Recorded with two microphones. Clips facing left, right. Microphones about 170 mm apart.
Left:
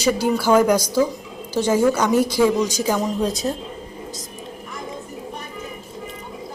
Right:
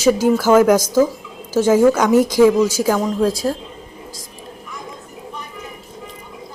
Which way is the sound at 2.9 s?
20° left (ahead or behind).